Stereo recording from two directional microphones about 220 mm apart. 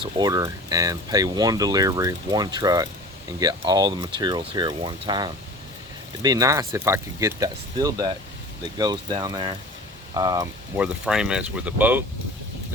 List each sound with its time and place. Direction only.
0.0 s speech: 15° right (ahead or behind)
10.8 s speech: 5° right (ahead or behind)